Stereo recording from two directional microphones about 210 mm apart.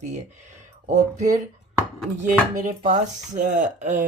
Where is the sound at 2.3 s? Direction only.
40° right (ahead or behind).